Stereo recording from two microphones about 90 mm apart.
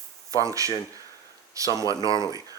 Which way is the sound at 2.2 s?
40° right (ahead or behind).